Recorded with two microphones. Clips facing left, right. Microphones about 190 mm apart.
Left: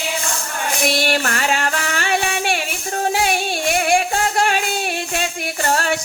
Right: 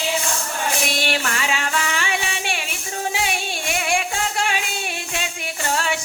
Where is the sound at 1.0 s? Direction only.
45° left (ahead or behind).